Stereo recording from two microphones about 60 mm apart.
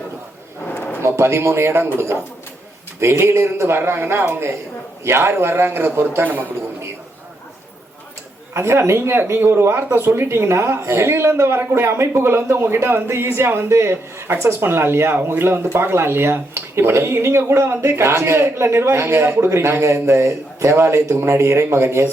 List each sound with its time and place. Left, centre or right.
0.7 s a sound: left
1.0 s a man's voice: right
8.5 s speech: right